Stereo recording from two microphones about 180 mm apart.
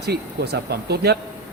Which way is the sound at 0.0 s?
65° right (ahead or behind).